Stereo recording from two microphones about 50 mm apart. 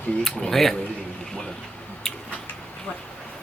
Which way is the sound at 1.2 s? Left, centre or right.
Centre.